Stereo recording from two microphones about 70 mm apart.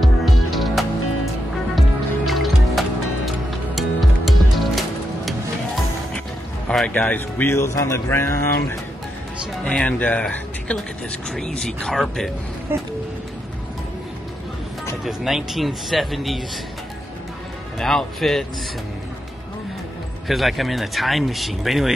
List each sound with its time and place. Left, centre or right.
0.0 s music: centre
6.9 s speech: left
9.7 s speech: centre
15.0 s speech: centre
17.7 s speech: centre
20.2 s speech: centre